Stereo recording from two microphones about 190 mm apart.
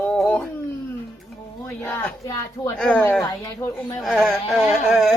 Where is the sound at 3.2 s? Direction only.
20° left (ahead or behind).